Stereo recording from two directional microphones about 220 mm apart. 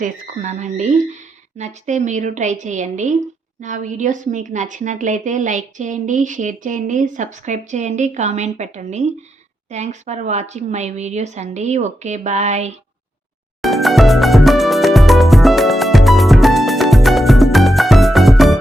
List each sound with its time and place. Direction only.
0.0 s a woman's voice: 35° right (ahead or behind)
13.6 s music: centre (ahead or behind)